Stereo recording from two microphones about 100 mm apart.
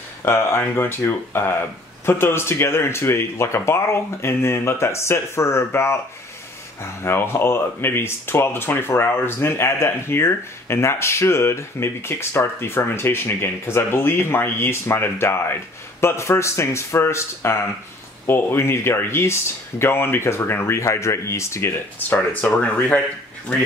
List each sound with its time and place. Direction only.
0.2 s speech: 25° left (ahead or behind)
22.1 s speech: 15° left (ahead or behind)